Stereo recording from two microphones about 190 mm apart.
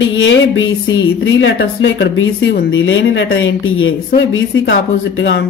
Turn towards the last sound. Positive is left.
turn(degrees=70)  # may be behind; listen again after turning